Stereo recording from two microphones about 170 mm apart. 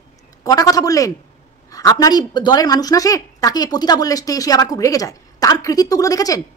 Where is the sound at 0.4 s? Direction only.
20° left (ahead or behind).